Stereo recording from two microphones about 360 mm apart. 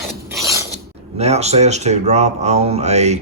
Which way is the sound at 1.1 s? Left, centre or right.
Centre.